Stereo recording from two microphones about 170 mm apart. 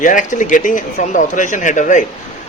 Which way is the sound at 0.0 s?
50° left (ahead or behind).